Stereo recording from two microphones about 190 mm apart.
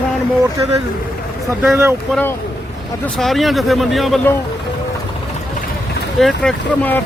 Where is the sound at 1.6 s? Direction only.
15° right (ahead or behind).